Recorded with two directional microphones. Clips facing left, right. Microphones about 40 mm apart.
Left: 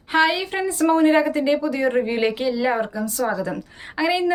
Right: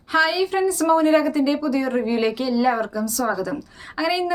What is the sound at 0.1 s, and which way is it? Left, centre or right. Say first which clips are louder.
A woman's voice: even; left.